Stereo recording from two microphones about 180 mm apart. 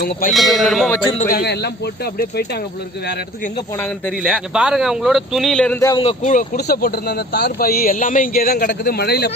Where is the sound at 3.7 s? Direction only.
10° left (ahead or behind).